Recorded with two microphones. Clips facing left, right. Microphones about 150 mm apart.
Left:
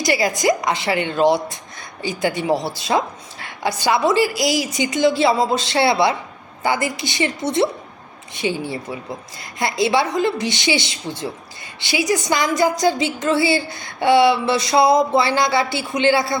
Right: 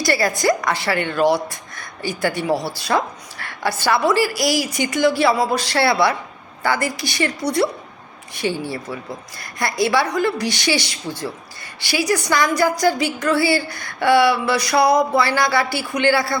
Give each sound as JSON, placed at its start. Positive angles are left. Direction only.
{"t": 0.0, "sound": "speech", "side_deg": 20}